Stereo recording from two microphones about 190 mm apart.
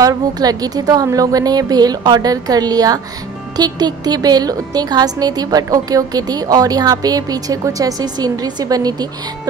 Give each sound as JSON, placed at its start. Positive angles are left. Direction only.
{"t": 0.0, "sound": "speech", "side_deg": -20}